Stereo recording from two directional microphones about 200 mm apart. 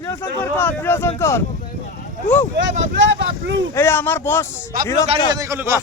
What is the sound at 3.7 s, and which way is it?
Speech, 10° left (ahead or behind).